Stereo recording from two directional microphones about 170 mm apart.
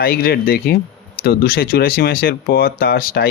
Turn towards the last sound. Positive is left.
turn(degrees=65)  # may be behind; listen again after turning